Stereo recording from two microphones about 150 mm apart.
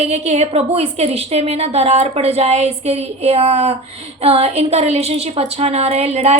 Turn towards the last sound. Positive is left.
turn(degrees=-45)  # may be behind; listen again after turning